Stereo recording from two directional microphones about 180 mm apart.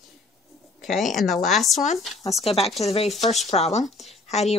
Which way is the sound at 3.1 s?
Centre (ahead or behind).